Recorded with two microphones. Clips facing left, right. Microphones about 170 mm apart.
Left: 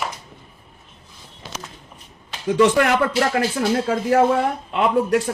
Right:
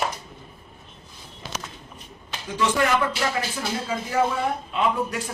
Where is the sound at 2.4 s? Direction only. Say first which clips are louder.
Left 7 dB; 65° left (ahead or behind).